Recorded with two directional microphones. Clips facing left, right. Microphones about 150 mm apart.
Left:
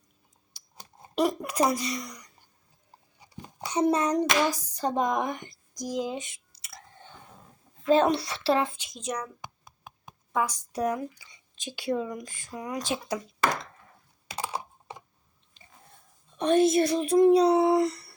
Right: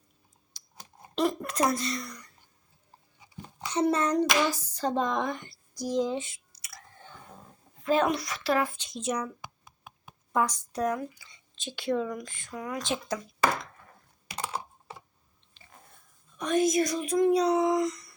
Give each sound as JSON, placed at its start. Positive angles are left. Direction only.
{"t": 1.1, "sound": "speech", "side_deg": 10}
{"t": 3.7, "sound": "speech", "side_deg": 15}
{"t": 7.9, "sound": "speech", "side_deg": 30}
{"t": 8.9, "sound": "speech", "side_deg": -5}
{"t": 9.4, "sound": "a sound", "side_deg": 40}
{"t": 10.3, "sound": "speech", "side_deg": 10}
{"t": 14.3, "sound": "typing", "side_deg": 10}
{"t": 16.4, "sound": "speech", "side_deg": 30}